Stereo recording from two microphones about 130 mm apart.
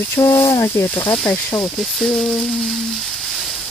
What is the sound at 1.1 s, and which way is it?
Speech, 15° left (ahead or behind).